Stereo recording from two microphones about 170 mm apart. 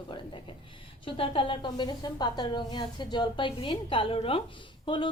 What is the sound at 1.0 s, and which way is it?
A woman's voice, 30° left (ahead or behind).